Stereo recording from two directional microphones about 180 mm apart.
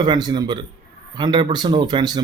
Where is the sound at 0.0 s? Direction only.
25° right (ahead or behind).